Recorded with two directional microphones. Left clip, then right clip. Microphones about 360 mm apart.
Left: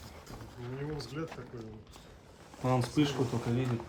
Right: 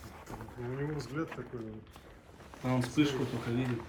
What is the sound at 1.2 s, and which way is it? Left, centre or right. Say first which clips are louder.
Speech: right 4 dB; right.